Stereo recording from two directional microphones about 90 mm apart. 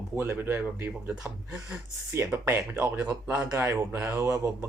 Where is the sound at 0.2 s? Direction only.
25° right (ahead or behind).